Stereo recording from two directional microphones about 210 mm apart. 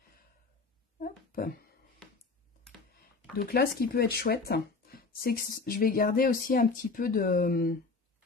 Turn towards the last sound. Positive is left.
turn(degrees=45)  # may be behind; listen again after turning